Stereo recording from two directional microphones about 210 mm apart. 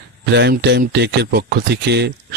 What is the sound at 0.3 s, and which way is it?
Speech, 55° right (ahead or behind).